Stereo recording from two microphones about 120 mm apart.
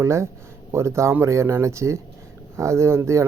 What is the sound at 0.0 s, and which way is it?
Speech, 25° right (ahead or behind).